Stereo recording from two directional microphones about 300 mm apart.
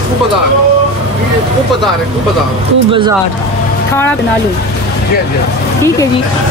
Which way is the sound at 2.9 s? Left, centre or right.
Centre.